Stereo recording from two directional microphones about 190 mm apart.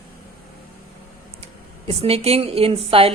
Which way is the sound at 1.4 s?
30° right (ahead or behind).